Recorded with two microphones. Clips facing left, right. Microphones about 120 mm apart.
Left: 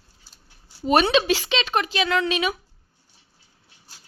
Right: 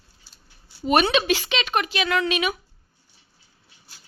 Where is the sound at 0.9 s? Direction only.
30° left (ahead or behind).